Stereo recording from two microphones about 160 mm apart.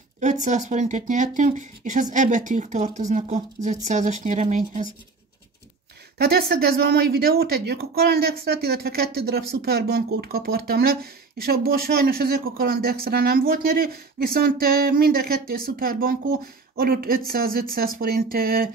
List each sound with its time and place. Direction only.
0.2 s speech: 50° right (ahead or behind)
6.1 s speech: 80° right